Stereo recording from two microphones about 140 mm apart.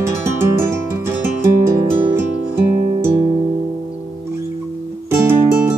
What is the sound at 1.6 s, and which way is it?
Music, 15° right (ahead or behind).